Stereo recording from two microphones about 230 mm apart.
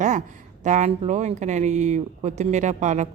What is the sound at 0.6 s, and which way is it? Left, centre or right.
A woman's voice, right.